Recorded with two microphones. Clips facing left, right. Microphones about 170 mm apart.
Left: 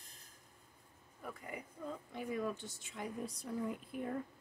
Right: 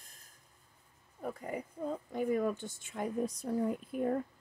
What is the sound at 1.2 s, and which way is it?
Speech, 40° right (ahead or behind).